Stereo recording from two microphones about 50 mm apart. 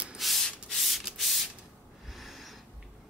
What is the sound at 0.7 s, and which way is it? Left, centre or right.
Sanding, centre.